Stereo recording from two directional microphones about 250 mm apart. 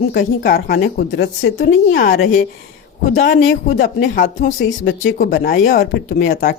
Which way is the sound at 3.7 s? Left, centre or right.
Left.